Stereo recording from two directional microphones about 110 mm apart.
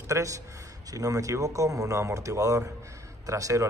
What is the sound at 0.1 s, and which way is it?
A man's voice, 30° right (ahead or behind).